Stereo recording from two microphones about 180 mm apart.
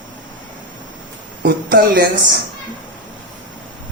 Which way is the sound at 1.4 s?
55° right (ahead or behind).